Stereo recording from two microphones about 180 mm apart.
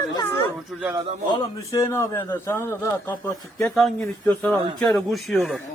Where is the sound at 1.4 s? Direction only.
15° left (ahead or behind); by 5.6 s centre (ahead or behind).